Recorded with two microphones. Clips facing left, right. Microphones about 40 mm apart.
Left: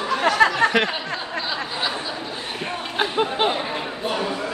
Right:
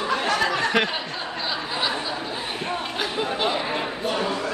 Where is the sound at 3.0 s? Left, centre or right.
Left.